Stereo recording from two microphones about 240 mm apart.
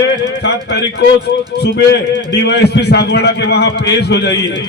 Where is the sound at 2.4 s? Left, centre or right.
Left.